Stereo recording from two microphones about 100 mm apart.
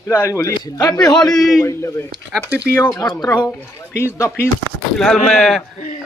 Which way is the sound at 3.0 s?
40° left (ahead or behind).